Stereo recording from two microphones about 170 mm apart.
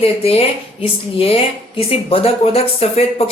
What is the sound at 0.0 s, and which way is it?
A woman's voice, 35° left (ahead or behind).